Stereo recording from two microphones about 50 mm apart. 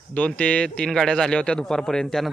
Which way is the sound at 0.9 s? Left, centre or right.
Centre.